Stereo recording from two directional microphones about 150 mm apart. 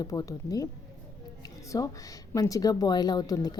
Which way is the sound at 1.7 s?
25° left (ahead or behind).